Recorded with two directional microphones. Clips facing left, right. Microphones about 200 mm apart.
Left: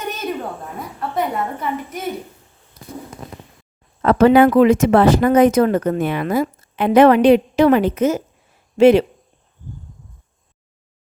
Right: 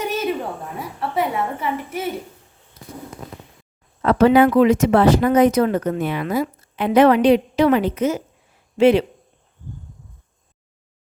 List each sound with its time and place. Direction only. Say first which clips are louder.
0.0 s a sound: right 4 dB; 10° right (ahead or behind)
0.8 s a woman's voice: even; 10° right (ahead or behind)
4.0 s speech: left 2 dB; 50° left (ahead or behind)